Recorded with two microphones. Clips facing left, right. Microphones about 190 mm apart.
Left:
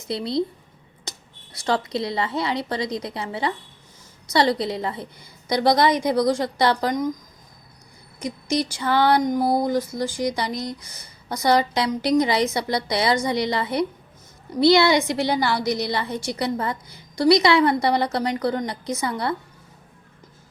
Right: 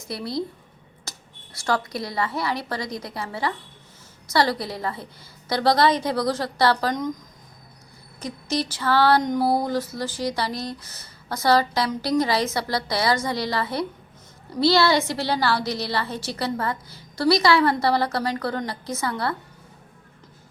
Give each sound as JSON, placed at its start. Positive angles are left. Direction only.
{"t": 0.1, "sound": "a woman's voice", "side_deg": 20}
{"t": 1.1, "sound": "a sound", "side_deg": 20}
{"t": 1.5, "sound": "a woman's voice", "side_deg": 20}
{"t": 8.2, "sound": "a woman's voice", "side_deg": 15}